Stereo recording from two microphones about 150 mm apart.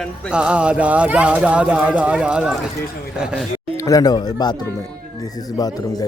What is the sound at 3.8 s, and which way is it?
Speech, 25° left (ahead or behind).